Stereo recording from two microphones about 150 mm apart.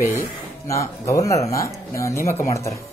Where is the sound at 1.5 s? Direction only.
20° left (ahead or behind).